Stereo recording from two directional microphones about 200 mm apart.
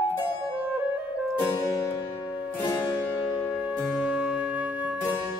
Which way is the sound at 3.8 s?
5° right (ahead or behind).